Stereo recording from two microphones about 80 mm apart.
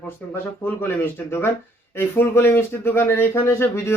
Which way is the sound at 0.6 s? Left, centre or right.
Left.